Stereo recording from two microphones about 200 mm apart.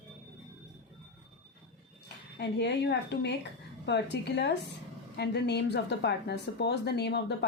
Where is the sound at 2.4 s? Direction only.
60° left (ahead or behind).